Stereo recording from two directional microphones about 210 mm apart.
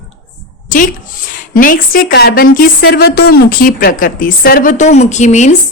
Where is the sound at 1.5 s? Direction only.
40° left (ahead or behind).